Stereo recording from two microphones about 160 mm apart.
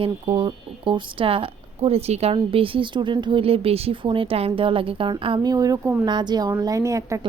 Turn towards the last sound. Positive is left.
turn(degrees=-20)  # may be behind; listen again after turning